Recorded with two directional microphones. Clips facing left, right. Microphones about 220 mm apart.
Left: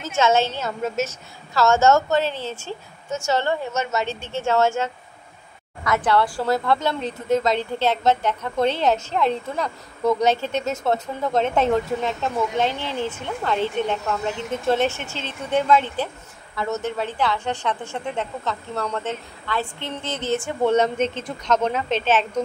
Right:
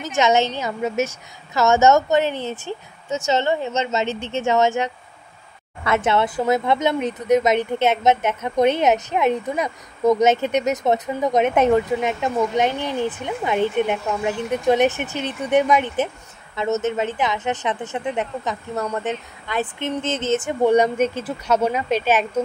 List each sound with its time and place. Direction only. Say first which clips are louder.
0.0 s a woman's voice: right 1 dB; 15° right (ahead or behind)